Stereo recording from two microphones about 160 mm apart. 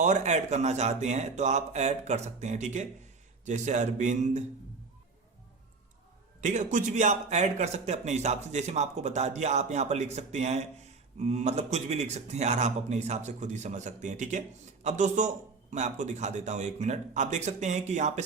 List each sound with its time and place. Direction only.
0.0 s speech: 50° right (ahead or behind)
6.4 s speech: 50° right (ahead or behind)